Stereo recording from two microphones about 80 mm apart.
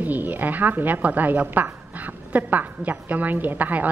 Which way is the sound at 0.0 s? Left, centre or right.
Right.